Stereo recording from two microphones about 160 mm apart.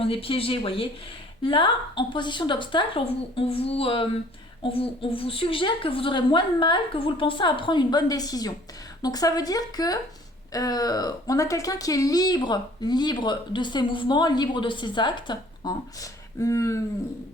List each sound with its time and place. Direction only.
0.0 s a woman's voice: 35° left (ahead or behind); by 16.8 s 20° left (ahead or behind)